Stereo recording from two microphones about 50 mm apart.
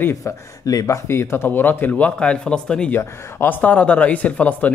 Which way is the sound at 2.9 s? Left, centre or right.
Left.